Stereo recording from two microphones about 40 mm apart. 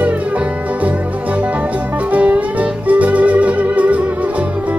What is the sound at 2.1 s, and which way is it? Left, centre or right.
Music, right.